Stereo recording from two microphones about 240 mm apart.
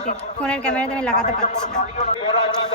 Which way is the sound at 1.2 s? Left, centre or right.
Left.